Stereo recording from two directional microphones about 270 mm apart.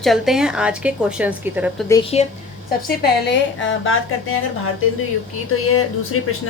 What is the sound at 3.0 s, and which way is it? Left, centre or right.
A woman's voice, left.